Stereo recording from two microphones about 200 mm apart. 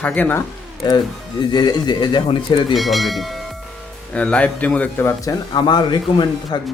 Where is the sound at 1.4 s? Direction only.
20° left (ahead or behind).